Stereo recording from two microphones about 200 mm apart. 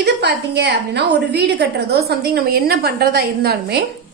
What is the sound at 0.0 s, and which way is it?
A woman's voice, 55° right (ahead or behind).